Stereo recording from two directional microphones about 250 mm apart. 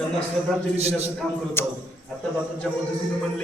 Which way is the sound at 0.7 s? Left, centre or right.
Right.